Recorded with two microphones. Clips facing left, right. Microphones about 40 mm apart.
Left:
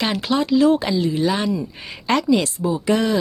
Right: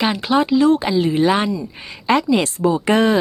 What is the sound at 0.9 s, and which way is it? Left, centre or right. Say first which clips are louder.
Speech: right 4 dB; right.